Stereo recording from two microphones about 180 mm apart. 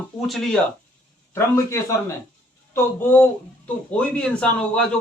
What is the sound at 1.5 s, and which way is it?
A man's voice, 15° left (ahead or behind).